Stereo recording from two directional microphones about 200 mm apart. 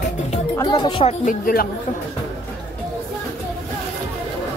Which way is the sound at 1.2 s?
45° left (ahead or behind).